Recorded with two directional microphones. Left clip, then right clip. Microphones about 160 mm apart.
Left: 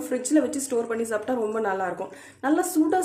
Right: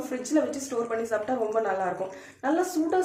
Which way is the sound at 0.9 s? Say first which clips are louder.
Left 1 dB; 45° left (ahead or behind).